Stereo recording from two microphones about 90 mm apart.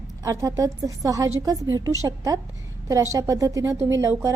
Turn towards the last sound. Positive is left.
turn(degrees=-35)  # may be behind; listen again after turning